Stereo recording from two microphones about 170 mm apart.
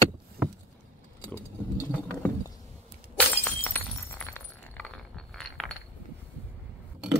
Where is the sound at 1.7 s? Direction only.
10° left (ahead or behind).